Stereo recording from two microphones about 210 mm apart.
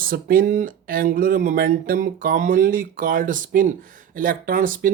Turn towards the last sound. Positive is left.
turn(degrees=-40)  # may be behind; listen again after turning